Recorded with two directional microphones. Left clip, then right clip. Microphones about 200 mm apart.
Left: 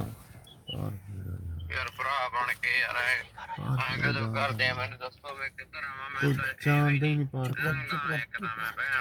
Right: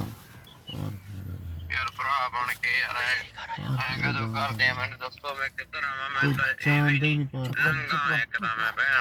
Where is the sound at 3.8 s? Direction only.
25° left (ahead or behind); by 5.1 s 5° left (ahead or behind).